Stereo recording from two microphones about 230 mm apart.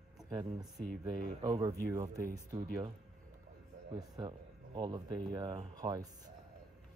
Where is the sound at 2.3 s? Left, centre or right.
Right.